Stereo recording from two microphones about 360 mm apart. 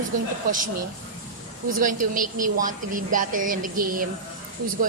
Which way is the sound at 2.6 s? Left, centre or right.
Right.